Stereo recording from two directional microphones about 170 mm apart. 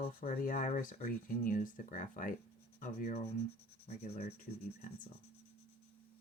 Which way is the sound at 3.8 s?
35° left (ahead or behind).